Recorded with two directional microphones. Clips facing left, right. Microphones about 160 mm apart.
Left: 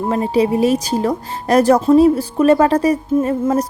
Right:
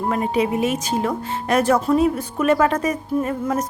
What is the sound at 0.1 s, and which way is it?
Speech, 30° left (ahead or behind).